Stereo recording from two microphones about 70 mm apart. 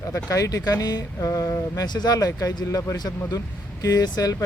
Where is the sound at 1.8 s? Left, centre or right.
Left.